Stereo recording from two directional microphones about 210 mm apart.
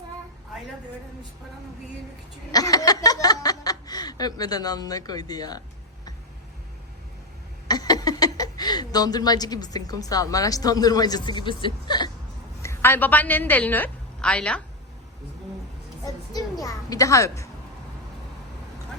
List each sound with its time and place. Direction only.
2.5 s speech: 15° left (ahead or behind)
7.7 s a woman's voice: 20° left (ahead or behind)
16.0 s speech: 15° left (ahead or behind)